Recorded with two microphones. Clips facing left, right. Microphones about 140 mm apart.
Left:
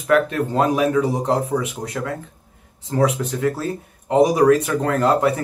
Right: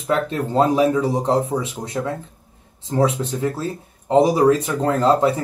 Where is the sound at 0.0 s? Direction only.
25° right (ahead or behind).